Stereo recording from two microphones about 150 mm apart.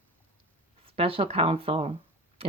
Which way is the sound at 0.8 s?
40° right (ahead or behind).